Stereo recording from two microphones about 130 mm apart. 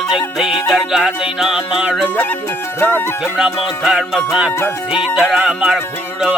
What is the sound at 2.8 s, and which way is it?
Music, 15° left (ahead or behind).